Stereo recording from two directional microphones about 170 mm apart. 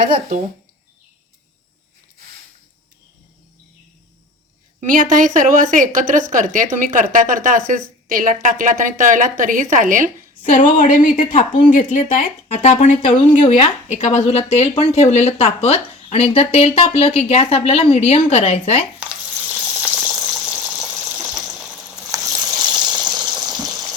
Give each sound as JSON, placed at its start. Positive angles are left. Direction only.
{"t": 4.9, "sound": "a woman's voice", "side_deg": -50}
{"t": 10.7, "sound": "speech", "side_deg": 50}
{"t": 13.1, "sound": "a woman's voice", "side_deg": 30}
{"t": 18.9, "sound": "a sound", "side_deg": -5}
{"t": 22.0, "sound": "a sound", "side_deg": -20}
{"t": 22.4, "sound": "water", "side_deg": -25}
{"t": 23.3, "sound": "water", "side_deg": -5}